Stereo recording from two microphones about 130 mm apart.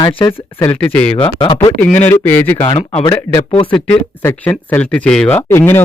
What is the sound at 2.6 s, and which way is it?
Speech, 45° left (ahead or behind).